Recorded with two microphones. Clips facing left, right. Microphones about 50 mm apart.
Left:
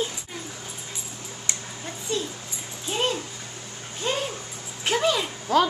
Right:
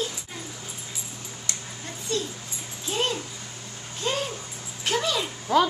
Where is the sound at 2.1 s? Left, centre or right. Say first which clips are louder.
Even; left.